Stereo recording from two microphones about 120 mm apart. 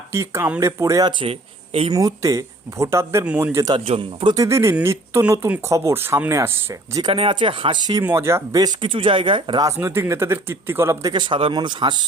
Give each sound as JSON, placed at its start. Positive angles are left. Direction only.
{"t": 0.1, "sound": "speech", "side_deg": -20}
{"t": 1.2, "sound": "speech", "side_deg": -55}
{"t": 1.9, "sound": "speech", "side_deg": -30}
{"t": 3.8, "sound": "speech", "side_deg": -50}
{"t": 4.4, "sound": "speech", "side_deg": -25}
{"t": 7.0, "sound": "speech", "side_deg": -45}
{"t": 8.0, "sound": "speech", "side_deg": -20}
{"t": 8.5, "sound": "speech", "side_deg": -35}
{"t": 9.7, "sound": "speech", "side_deg": -20}
{"t": 11.1, "sound": "speech", "side_deg": -45}